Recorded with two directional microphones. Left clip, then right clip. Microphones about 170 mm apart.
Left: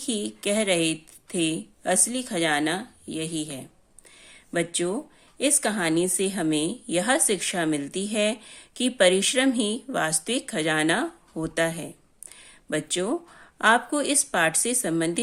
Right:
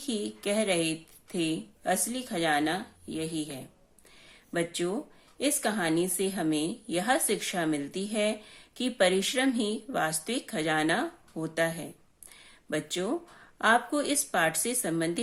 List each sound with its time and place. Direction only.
0.0 s a woman's voice: 40° left (ahead or behind)
4.2 s a sound: 40° left (ahead or behind)
5.4 s a woman's voice: 40° left (ahead or behind)